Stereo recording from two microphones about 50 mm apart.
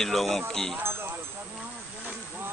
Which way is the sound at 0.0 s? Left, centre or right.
Centre.